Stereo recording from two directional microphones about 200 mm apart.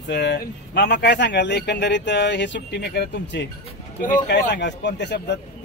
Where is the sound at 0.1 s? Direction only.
55° left (ahead or behind).